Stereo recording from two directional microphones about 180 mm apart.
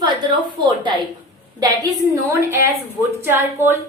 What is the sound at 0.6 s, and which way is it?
A woman's voice, 25° right (ahead or behind).